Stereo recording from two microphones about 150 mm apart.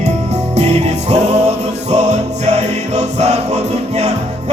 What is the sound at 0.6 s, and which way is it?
Music, 45° right (ahead or behind).